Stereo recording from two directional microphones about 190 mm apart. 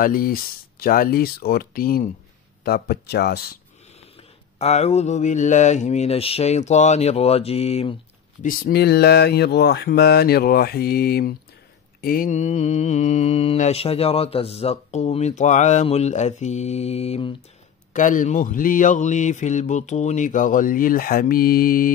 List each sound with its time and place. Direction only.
0.0 s speech: 50° left (ahead or behind)
4.6 s mantra: 35° left (ahead or behind)
8.4 s speech: 50° left (ahead or behind)
12.0 s mantra: 50° left (ahead or behind); by 17.3 s 35° left (ahead or behind)
17.9 s speech: 40° left (ahead or behind)